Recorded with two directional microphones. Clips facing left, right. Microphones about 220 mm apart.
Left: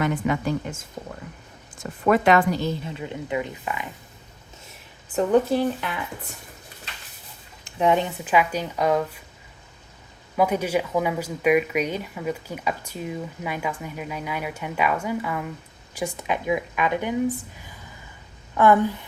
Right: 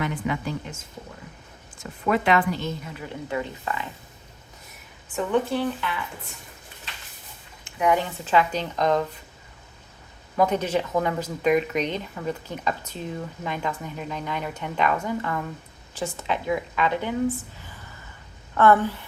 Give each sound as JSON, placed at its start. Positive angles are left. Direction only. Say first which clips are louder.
{"t": 0.0, "sound": "a woman's voice", "louder": "left 4 dB", "side_deg": 45}
{"t": 1.8, "sound": "speech", "louder": "left 4 dB", "side_deg": 45}
{"t": 5.1, "sound": "speech", "louder": "left 4 dB", "side_deg": 40}
{"t": 7.6, "sound": "speech", "louder": "left 2 dB", "side_deg": 25}
{"t": 10.3, "sound": "speech", "louder": "even", "side_deg": 10}